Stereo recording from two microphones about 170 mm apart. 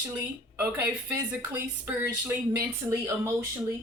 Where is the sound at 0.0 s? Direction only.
15° right (ahead or behind).